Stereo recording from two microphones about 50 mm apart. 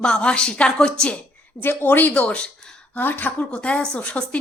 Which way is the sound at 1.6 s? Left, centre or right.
Left.